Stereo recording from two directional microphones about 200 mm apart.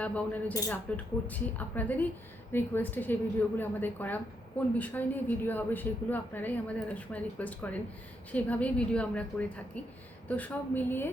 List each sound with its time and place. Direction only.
0.0 s a woman's voice: 5° left (ahead or behind)